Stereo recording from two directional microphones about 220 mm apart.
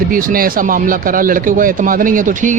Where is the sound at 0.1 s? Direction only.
40° right (ahead or behind).